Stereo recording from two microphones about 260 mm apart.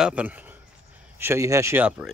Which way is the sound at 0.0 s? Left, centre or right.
Centre.